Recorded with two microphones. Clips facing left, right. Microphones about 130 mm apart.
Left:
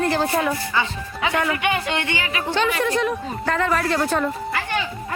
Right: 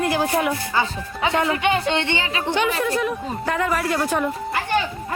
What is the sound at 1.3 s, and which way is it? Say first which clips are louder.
A woman's voice: right 2 dB; 25° right (ahead or behind).